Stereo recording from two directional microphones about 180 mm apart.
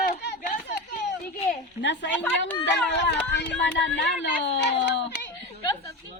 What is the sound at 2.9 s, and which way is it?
Speech, 80° left.